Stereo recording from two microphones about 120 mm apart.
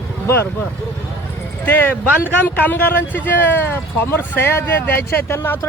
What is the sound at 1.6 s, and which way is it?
Speech, 15° left (ahead or behind).